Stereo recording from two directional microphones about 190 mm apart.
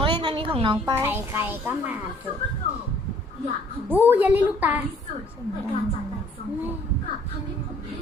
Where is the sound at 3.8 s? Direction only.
10° right (ahead or behind).